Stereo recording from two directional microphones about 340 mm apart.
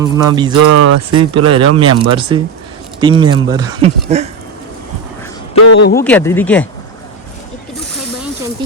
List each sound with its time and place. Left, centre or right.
0.0 s speech: centre
0.5 s speech: right
1.1 s speech: centre
5.5 s speech: left
6.0 s speech: centre